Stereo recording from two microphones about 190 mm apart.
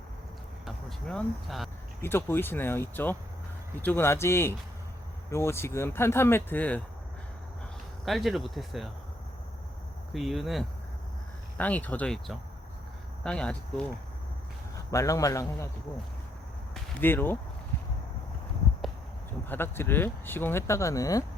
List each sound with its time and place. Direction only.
0.6 s a sound: 5° left (ahead or behind)
2.0 s speech: 10° left (ahead or behind)
8.0 s speech: centre (ahead or behind)
10.1 s speech: centre (ahead or behind)
14.8 s speech: 15° left (ahead or behind)
17.0 s speech: 10° left (ahead or behind)
19.5 s speech: 10° left (ahead or behind)